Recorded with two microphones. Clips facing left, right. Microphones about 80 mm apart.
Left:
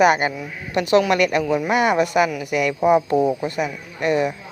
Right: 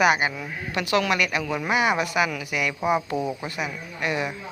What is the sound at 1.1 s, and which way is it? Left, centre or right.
A woman's voice, left.